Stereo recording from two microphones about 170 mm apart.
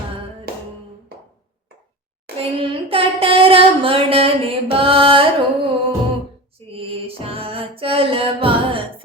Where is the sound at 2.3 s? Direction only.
30° right (ahead or behind).